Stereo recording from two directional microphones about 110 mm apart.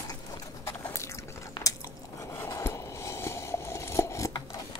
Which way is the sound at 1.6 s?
45° left (ahead or behind).